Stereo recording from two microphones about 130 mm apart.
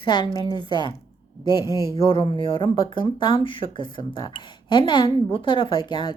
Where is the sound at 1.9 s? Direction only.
45° left (ahead or behind).